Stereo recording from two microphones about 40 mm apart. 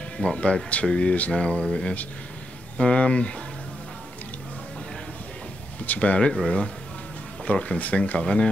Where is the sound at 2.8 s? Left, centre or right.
Left.